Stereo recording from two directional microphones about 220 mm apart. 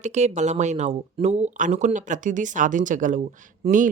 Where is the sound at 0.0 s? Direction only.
30° right (ahead or behind).